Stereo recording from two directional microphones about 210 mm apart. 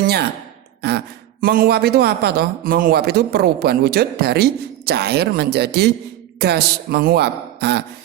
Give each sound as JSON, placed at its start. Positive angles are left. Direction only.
{"t": 0.8, "sound": "speech", "side_deg": -50}